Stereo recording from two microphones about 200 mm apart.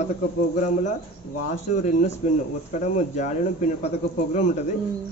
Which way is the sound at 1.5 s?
40° left (ahead or behind).